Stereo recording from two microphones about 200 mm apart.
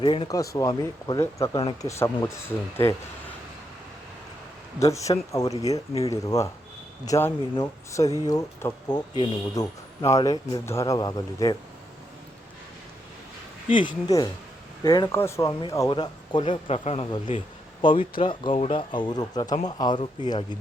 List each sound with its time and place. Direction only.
0.0 s speech: 25° left (ahead or behind)
1.9 s speech: 10° left (ahead or behind)
5.3 s speech: 15° left (ahead or behind)
13.7 s speech: 25° left (ahead or behind)